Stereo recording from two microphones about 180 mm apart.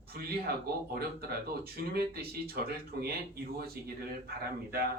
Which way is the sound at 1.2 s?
60° right (ahead or behind).